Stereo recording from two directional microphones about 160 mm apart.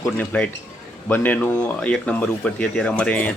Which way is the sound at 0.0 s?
10° left (ahead or behind).